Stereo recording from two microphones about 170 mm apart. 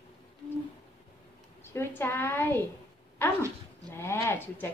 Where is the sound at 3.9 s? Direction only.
15° left (ahead or behind).